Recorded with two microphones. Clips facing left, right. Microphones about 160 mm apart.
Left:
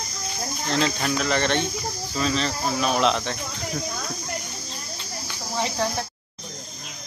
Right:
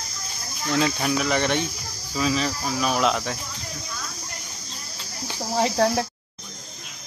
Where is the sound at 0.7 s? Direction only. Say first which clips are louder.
Right 2 dB; 10° right (ahead or behind).